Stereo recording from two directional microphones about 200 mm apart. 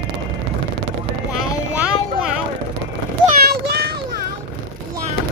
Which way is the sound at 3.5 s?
50° right (ahead or behind).